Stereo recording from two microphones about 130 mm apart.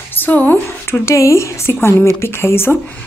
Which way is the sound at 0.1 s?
15° left (ahead or behind).